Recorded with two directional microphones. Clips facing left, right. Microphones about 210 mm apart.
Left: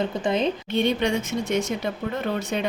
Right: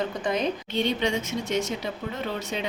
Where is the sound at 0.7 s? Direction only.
55° left (ahead or behind).